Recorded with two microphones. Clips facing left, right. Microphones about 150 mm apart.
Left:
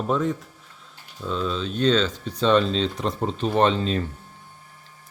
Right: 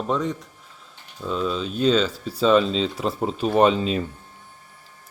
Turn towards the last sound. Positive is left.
turn(degrees=-10)  # may be behind; listen again after turning